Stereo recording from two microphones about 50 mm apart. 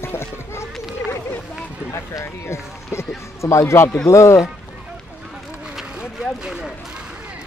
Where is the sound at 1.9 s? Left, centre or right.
Left.